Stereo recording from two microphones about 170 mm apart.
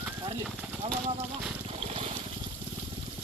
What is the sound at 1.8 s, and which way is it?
Trickle, 35° right (ahead or behind).